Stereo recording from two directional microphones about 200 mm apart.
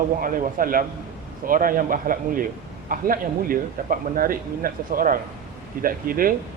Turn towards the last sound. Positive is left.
turn(degrees=-45)  # may be behind; listen again after turning